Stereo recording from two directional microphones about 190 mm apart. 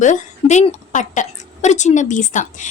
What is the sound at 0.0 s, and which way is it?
A woman's voice, 40° left (ahead or behind).